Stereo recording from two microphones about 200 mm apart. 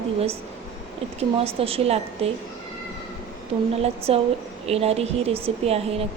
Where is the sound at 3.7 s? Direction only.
30° right (ahead or behind).